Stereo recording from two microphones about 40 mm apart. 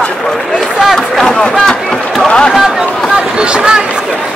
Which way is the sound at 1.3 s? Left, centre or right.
Centre.